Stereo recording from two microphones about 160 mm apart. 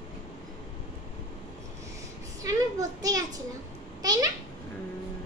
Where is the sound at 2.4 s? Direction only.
20° right (ahead or behind).